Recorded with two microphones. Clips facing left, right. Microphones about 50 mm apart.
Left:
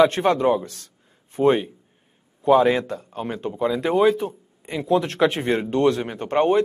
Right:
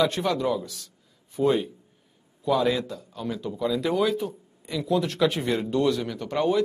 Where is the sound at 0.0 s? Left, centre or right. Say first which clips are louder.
Left 7 dB; left.